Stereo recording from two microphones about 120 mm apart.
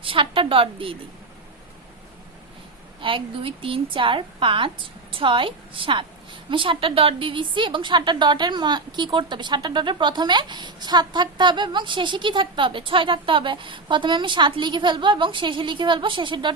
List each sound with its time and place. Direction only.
0.0 s a woman's voice: 50° right (ahead or behind)
3.0 s a woman's voice: 45° right (ahead or behind)